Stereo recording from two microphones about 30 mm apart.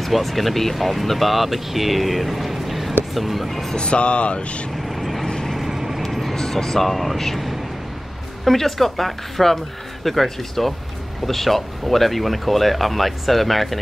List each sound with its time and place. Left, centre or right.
0.0 s speech: centre
3.7 s speech: left
4.8 s vehicle: centre
5.2 s vehicle: left
5.7 s vehicle: centre
6.3 s a woman's voice: centre
6.9 s speech: centre
8.5 s a woman's voice: centre